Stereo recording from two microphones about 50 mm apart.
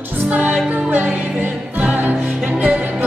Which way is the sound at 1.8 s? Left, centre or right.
Right.